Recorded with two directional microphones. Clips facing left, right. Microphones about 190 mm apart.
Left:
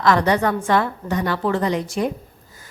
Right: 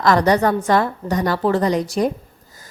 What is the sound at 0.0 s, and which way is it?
Speech, 40° right (ahead or behind).